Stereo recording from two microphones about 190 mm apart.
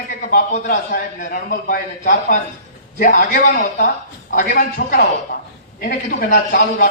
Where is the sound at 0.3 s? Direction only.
45° left (ahead or behind).